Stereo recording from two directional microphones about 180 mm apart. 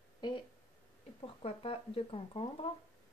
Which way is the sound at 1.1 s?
30° left (ahead or behind).